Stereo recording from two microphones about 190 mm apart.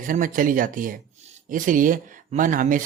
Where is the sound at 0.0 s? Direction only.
45° right (ahead or behind).